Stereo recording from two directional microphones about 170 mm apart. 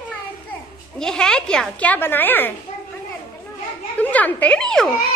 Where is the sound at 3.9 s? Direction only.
10° left (ahead or behind).